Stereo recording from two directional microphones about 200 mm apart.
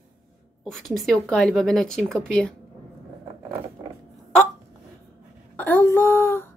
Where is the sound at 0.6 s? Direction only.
Centre (ahead or behind).